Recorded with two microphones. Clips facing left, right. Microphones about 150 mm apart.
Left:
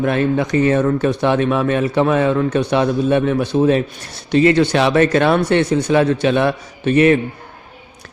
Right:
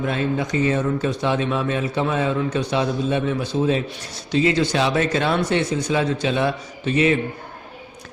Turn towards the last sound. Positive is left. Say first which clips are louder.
# left 6 dB
turn(degrees=60)  # may be behind; listen again after turning